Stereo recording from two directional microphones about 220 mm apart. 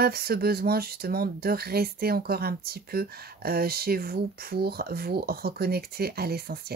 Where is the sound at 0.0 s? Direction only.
45° right (ahead or behind).